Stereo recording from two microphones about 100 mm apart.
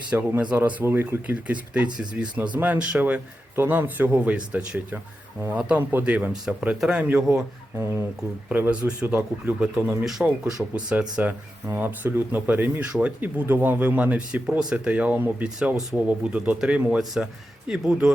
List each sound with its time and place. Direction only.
0.1 s speech: 15° right (ahead or behind)
8.4 s speech: 15° right (ahead or behind)
10.0 s speech: 5° right (ahead or behind)